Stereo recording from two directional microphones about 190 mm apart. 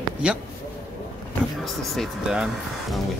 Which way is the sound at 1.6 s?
Centre (ahead or behind).